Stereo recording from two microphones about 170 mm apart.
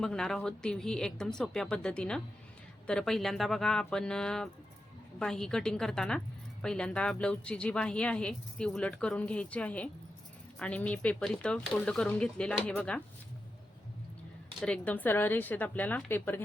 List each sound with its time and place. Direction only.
0.0 s a woman's voice: 5° left (ahead or behind)
14.6 s speech: 5° left (ahead or behind)